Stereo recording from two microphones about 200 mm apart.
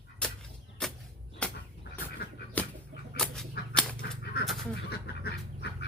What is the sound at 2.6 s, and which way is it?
Chicken, 5° left (ahead or behind).